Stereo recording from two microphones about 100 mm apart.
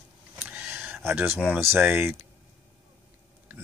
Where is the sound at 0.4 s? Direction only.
15° right (ahead or behind).